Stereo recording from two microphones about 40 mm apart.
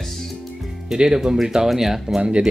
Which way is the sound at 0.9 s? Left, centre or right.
Centre.